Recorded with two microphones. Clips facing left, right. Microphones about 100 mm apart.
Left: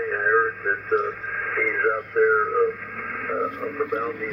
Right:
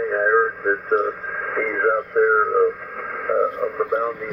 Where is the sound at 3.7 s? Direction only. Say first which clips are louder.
Right 2 dB; 30° right (ahead or behind).